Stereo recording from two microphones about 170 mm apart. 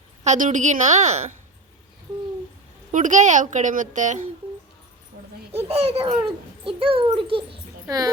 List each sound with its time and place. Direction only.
0.3 s a woman's voice: 50° right (ahead or behind)
2.9 s a woman's voice: 50° right (ahead or behind)
5.5 s a child's voice: 35° right (ahead or behind)
7.9 s speech: 20° right (ahead or behind)